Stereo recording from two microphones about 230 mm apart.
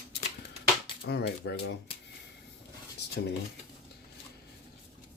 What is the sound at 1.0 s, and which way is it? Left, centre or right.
Speech, left.